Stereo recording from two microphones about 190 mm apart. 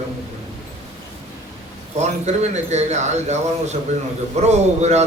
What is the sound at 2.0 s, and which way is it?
Speech, 35° right (ahead or behind).